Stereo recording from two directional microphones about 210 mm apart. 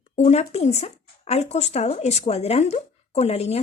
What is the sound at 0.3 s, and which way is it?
Speech, 30° left (ahead or behind).